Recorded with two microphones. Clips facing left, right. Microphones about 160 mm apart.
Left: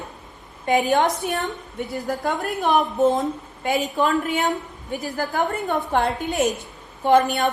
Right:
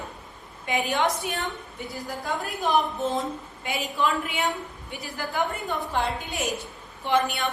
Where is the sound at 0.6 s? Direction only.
45° left (ahead or behind).